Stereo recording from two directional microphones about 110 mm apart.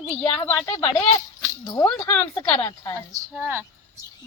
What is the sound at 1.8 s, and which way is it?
Speech, 15° left (ahead or behind).